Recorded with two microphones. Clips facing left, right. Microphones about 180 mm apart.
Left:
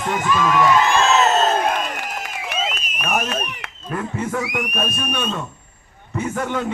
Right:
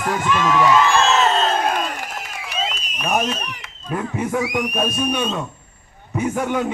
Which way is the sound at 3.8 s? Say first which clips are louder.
Right 1 dB; 15° right (ahead or behind).